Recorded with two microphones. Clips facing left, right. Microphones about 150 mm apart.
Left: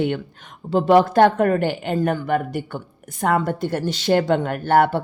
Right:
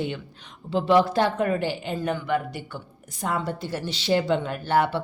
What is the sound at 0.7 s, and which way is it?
Speech, 50° left (ahead or behind).